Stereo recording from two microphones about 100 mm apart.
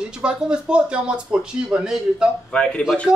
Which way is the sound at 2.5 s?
10° left (ahead or behind).